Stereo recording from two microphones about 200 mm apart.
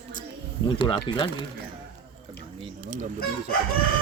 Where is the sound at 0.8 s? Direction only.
25° left (ahead or behind).